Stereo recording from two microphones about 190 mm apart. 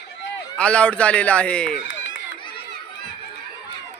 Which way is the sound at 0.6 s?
5° left (ahead or behind).